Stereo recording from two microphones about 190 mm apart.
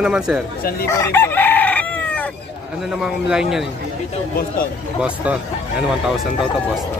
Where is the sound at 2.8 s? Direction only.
5° right (ahead or behind).